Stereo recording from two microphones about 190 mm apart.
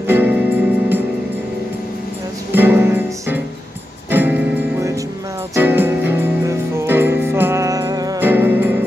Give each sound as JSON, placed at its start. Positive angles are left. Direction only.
{"t": 0.0, "sound": "music", "side_deg": -10}
{"t": 2.5, "sound": "music", "side_deg": -10}